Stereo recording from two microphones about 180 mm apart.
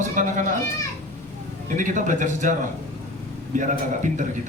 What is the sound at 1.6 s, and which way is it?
Speech, 45° right (ahead or behind).